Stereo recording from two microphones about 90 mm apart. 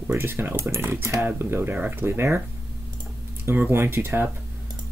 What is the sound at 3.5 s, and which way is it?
Speech, 25° right (ahead or behind).